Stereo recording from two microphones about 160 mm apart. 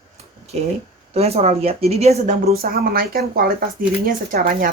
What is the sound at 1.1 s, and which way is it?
Speech, 40° right (ahead or behind).